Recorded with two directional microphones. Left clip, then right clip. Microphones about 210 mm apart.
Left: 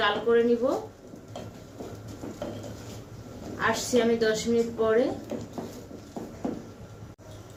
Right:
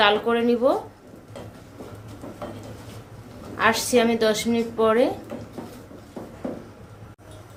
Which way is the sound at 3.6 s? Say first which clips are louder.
Right 5 dB; 40° right (ahead or behind).